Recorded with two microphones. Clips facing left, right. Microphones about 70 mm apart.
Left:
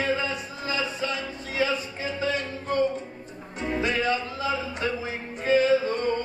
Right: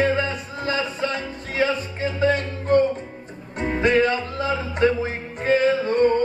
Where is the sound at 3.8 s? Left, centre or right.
Right.